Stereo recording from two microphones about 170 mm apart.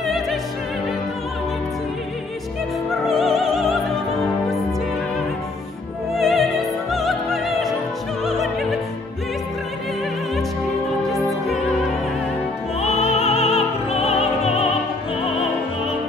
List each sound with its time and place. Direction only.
0.0 s music: centre (ahead or behind)
2.9 s music: centre (ahead or behind)
6.1 s music: centre (ahead or behind)
6.9 s opera: centre (ahead or behind)
11.1 s music: centre (ahead or behind)
12.8 s music: 35° left (ahead or behind)